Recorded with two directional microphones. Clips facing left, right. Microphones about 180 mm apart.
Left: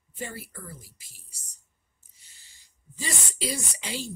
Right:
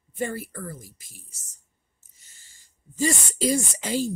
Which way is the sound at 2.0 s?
45° right (ahead or behind).